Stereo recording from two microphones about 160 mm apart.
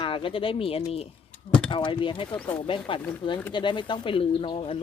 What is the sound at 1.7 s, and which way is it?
Speech, 30° left (ahead or behind).